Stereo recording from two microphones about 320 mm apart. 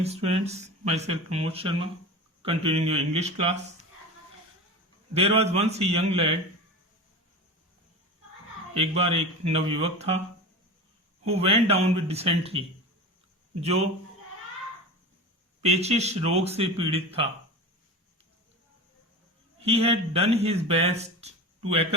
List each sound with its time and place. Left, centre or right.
0.0 s speech: centre
5.1 s speech: centre
8.7 s speech: centre
11.3 s speech: centre
15.6 s speech: centre
19.6 s speech: centre